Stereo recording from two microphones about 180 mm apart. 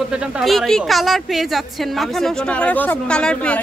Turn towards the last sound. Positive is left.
turn(degrees=5)  # may be behind; listen again after turning